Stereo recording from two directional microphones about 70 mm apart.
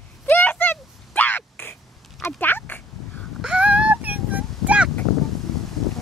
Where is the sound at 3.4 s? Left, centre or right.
Centre.